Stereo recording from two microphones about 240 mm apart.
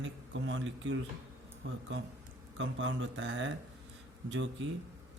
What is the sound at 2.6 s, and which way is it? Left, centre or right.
Speech, right.